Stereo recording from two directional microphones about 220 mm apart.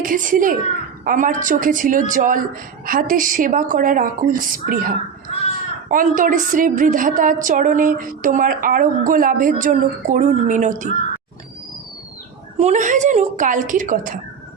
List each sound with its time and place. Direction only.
0.0 s a woman's voice: 40° right (ahead or behind)
12.5 s a woman's voice: 35° right (ahead or behind)